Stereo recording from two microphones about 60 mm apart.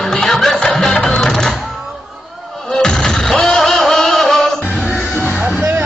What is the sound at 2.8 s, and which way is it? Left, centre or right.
Music, centre.